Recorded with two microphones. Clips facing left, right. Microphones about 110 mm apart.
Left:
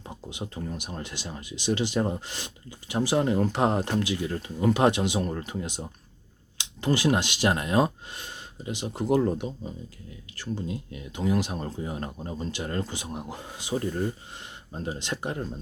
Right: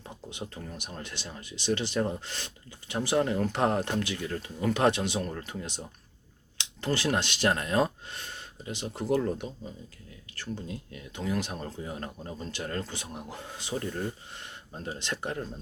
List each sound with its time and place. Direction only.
0.3 s speech: 15° left (ahead or behind)